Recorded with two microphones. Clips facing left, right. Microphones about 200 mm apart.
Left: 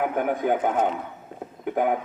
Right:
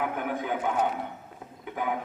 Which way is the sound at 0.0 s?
50° left (ahead or behind).